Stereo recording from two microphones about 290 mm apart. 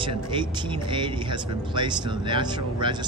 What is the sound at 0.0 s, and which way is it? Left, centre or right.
Speech, centre.